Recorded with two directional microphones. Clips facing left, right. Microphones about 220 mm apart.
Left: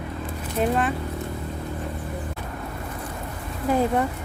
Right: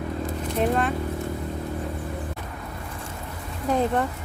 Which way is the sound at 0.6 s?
5° left (ahead or behind).